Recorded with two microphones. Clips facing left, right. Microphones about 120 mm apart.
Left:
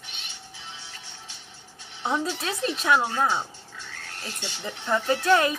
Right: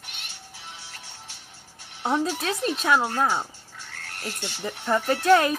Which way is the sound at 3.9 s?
60° right (ahead or behind).